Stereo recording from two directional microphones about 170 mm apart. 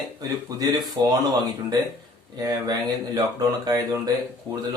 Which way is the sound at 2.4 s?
20° right (ahead or behind).